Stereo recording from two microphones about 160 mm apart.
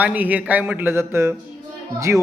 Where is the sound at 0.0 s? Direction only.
10° right (ahead or behind).